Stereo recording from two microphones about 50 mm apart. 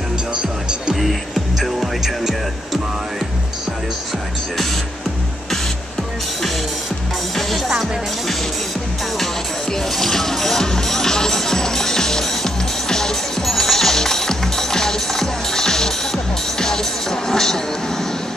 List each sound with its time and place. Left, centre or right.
0.3 s music: centre
1.6 s music: centre
7.3 s music: centre
9.2 s music: centre